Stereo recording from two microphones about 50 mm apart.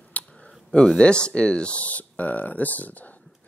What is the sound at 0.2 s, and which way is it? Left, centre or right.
Clicking, left.